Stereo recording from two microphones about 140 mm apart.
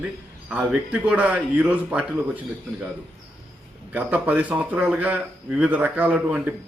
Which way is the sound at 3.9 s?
10° right (ahead or behind).